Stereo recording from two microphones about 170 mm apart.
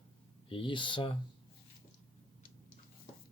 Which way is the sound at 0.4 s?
30° left (ahead or behind).